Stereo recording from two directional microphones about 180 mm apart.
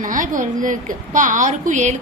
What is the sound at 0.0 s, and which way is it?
A woman's voice, 45° right (ahead or behind).